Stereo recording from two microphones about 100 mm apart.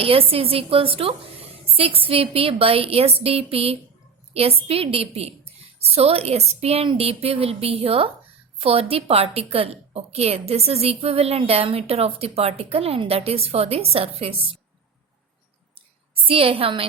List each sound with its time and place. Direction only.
0.0 s a woman's voice: 70° right (ahead or behind); by 6.8 s 90° right
6.9 s a woman's voice: 80° right
15.7 s a sound: 65° right (ahead or behind)